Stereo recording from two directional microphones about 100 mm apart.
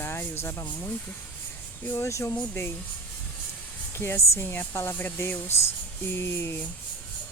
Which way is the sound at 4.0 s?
25° left (ahead or behind).